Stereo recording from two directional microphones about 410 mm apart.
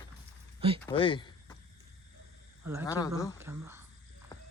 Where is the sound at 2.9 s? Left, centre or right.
Centre.